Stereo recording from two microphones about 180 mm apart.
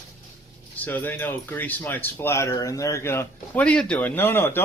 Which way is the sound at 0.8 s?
10° left (ahead or behind).